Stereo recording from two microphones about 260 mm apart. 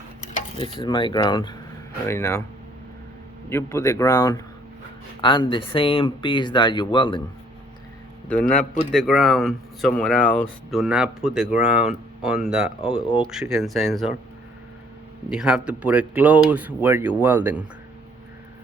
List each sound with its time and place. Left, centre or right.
0.6 s speech: centre
3.5 s speech: centre
8.4 s a man's voice: left
8.9 s speech: centre
15.3 s speech: centre